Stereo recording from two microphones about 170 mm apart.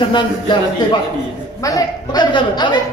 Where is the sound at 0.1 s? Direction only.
25° left (ahead or behind).